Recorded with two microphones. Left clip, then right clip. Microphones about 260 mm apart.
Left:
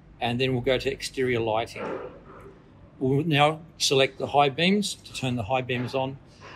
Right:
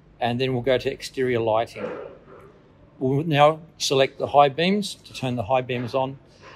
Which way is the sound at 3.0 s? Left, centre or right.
Right.